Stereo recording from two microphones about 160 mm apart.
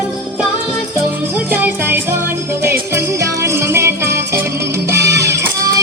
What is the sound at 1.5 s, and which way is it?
Music, 10° right (ahead or behind).